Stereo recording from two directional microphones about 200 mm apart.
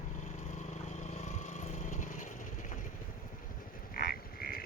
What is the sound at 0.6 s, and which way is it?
Vehicle, 35° left (ahead or behind).